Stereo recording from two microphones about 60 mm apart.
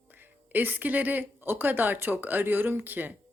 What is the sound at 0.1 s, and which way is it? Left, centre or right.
Speech, right.